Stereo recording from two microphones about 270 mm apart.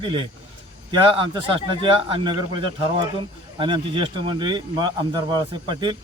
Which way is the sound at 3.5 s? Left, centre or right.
Centre.